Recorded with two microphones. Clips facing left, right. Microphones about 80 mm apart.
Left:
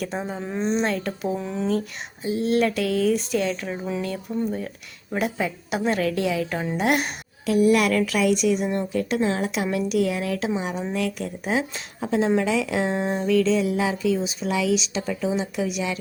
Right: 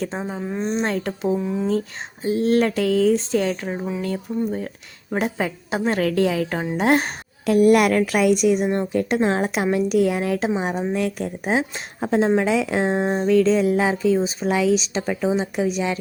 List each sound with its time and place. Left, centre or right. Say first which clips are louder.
0.0 s a woman's voice: right 2 dB; right
0.3 s a woman's voice: even; centre
0.9 s speech: right 3 dB; right
1.4 s a woman's voice: right 4 dB; centre
1.6 s speech: right 2 dB; right
4.3 s a woman's voice: right 2 dB; centre
5.1 s speech: right 2 dB; right
6.0 s a woman's voice: right 4 dB; right
7.4 s a woman's voice: right 4 dB; right
13.3 s speech: right 4 dB; right
15.0 s a woman's voice: right 3 dB; right
15.3 s speech: right 5 dB; right